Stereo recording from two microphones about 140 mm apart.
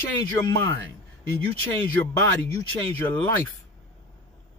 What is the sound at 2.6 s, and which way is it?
Speech, 15° left (ahead or behind).